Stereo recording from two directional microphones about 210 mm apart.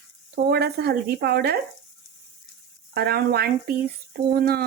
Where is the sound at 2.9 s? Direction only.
50° right (ahead or behind).